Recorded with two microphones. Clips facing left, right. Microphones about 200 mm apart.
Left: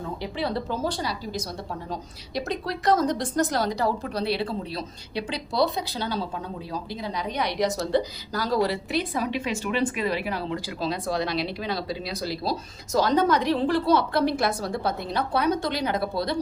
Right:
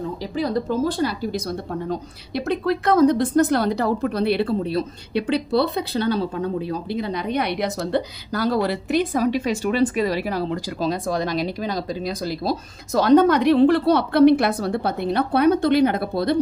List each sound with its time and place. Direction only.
0.2 s speech: 45° right (ahead or behind)